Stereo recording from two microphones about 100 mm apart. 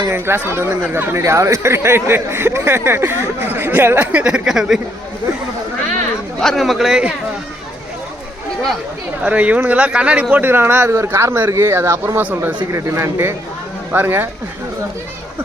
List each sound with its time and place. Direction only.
0.1 s speech: 25° right (ahead or behind); by 4.8 s 5° right (ahead or behind)
6.4 s speech: centre (ahead or behind)
9.2 s speech: 15° right (ahead or behind)
12.7 s speech: 30° right (ahead or behind)